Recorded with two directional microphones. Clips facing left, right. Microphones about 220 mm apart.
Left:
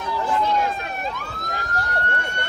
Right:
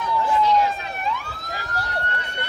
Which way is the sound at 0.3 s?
55° left (ahead or behind).